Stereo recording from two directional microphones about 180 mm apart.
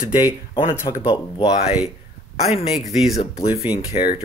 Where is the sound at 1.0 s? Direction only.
25° left (ahead or behind).